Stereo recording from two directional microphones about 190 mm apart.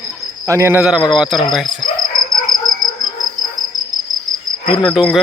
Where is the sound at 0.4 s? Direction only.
15° right (ahead or behind).